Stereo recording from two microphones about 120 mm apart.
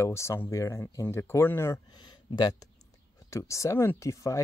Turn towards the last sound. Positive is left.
turn(degrees=25)  # may be behind; listen again after turning